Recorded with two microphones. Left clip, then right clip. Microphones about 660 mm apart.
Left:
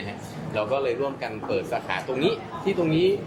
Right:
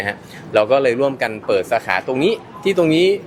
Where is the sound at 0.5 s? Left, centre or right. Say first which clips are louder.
Right 11 dB; right.